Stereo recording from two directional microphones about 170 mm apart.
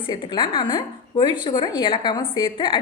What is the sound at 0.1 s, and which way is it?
A woman's voice, 25° left (ahead or behind).